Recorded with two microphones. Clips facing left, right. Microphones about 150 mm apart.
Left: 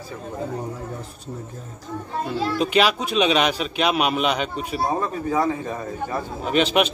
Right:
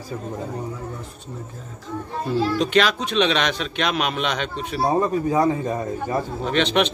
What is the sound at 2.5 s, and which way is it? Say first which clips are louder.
Speech: left 3 dB; 5° left (ahead or behind).